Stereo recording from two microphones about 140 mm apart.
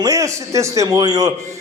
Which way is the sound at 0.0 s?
25° right (ahead or behind).